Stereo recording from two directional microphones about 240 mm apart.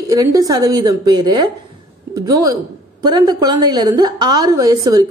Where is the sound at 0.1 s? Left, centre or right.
Centre.